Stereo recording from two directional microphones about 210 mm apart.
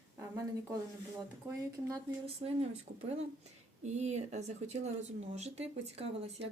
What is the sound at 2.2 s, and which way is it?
Speech, 30° right (ahead or behind).